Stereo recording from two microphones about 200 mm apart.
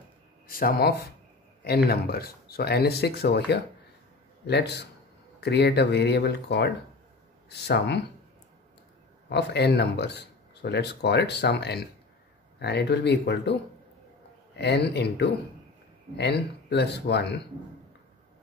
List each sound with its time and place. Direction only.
0.5 s speech: 45° left (ahead or behind)
9.3 s speech: 55° left (ahead or behind)